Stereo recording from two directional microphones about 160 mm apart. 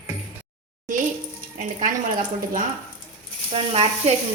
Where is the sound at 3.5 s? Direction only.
35° right (ahead or behind).